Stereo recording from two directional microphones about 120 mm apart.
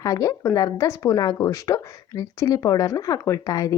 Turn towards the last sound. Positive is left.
turn(degrees=30)  # may be behind; listen again after turning